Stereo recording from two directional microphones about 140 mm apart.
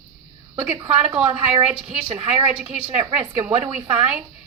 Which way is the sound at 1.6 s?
10° right (ahead or behind).